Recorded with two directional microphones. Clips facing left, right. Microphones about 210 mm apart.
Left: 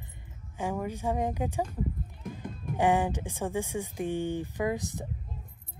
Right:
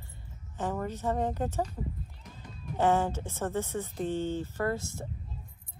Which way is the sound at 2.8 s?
15° left (ahead or behind).